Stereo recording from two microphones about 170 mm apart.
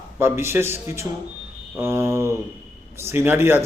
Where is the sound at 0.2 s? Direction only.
15° right (ahead or behind).